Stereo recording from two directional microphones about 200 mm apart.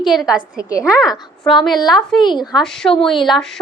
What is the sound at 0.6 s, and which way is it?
Speech, 15° left (ahead or behind).